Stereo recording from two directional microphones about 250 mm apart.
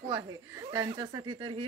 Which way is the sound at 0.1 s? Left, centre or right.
Centre.